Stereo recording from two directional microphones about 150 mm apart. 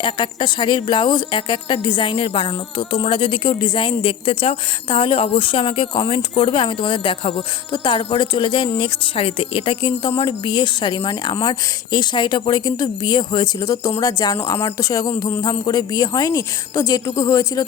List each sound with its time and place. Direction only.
0.0 s a woman's voice: 30° left (ahead or behind)